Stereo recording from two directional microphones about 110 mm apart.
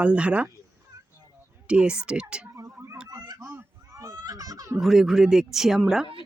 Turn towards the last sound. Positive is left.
turn(degrees=-5)  # may be behind; listen again after turning